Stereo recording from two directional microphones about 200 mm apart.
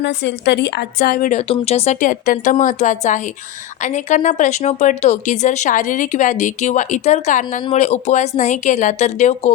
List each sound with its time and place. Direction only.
0.0 s a woman's voice: 60° left (ahead or behind); by 1.4 s 45° left (ahead or behind)
1.5 s speech: 30° left (ahead or behind)